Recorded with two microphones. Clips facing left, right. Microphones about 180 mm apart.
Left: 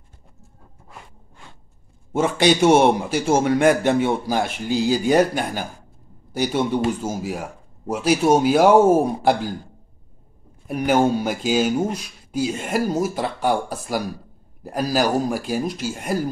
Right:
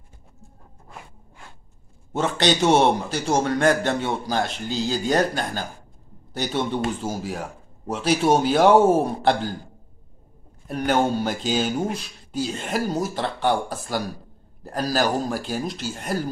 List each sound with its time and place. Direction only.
2.1 s speech: 10° left (ahead or behind)
10.7 s speech: 10° left (ahead or behind)